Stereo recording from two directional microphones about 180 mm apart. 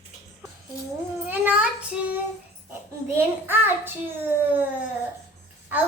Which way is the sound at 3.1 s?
10° right (ahead or behind).